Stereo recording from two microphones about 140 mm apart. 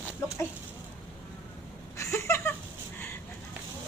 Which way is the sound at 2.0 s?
20° left (ahead or behind).